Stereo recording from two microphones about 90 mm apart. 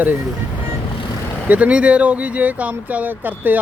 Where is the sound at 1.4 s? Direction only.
15° right (ahead or behind).